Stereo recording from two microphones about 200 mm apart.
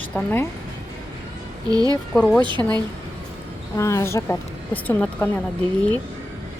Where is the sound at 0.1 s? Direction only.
10° left (ahead or behind).